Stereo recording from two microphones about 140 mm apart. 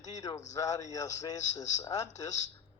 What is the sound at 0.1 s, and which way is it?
Speech, 25° left (ahead or behind).